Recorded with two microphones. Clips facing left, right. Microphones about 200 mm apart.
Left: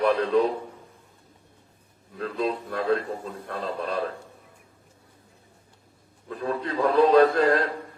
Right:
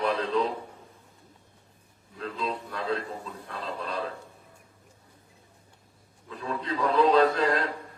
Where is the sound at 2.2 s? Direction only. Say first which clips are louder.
Left 5 dB; 60° left (ahead or behind).